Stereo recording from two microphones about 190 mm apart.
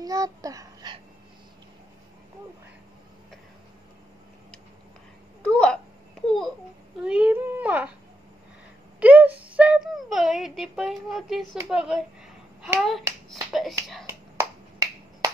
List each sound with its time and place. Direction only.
0.0 s babbling: 20° right (ahead or behind)
5.4 s babbling: 5° left (ahead or behind)
7.0 s a sound: 5° right (ahead or behind)
9.0 s a sound: 10° right (ahead or behind)
13.3 s finger snapping: centre (ahead or behind)
14.0 s finger snapping: 10° right (ahead or behind)